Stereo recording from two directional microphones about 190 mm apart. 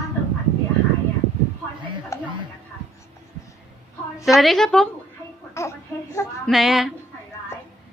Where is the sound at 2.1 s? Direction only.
15° left (ahead or behind).